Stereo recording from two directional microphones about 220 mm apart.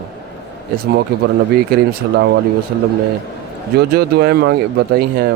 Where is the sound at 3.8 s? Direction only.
45° right (ahead or behind).